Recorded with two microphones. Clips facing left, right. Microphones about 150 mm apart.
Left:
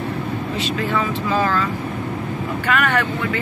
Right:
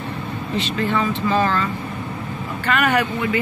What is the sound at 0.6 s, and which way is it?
Speech, 5° left (ahead or behind).